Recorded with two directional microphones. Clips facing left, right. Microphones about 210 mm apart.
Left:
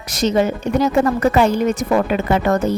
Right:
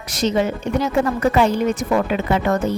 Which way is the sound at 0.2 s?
40° left (ahead or behind).